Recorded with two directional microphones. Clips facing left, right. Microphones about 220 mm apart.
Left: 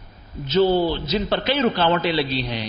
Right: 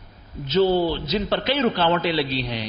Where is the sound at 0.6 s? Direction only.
35° left (ahead or behind).